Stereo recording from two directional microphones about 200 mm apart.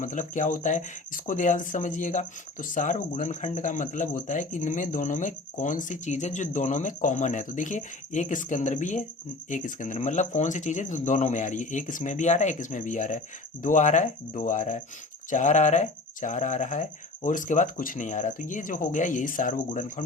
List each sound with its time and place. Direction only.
0.0 s speech: 40° left (ahead or behind)